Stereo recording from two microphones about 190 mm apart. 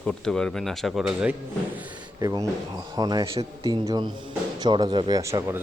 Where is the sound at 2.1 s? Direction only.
20° right (ahead or behind).